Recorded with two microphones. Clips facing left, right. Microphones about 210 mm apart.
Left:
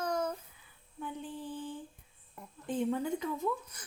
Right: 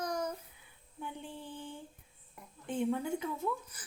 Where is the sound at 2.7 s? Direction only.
5° right (ahead or behind).